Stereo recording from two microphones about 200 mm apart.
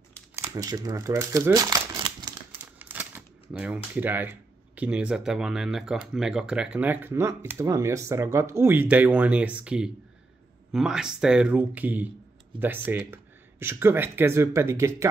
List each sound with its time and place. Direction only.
0.4 s speech: 15° right (ahead or behind)
2.5 s speech: 10° right (ahead or behind)